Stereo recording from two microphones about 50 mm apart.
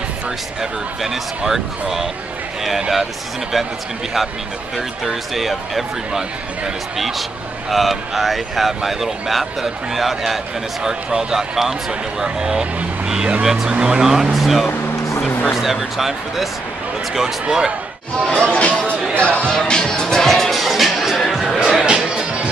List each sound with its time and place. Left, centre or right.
0.6 s speech: centre
4.7 s speech: centre
10.8 s speech: centre
18.2 s speech: centre
19.1 s speech: left
19.5 s music: centre
21.5 s music: centre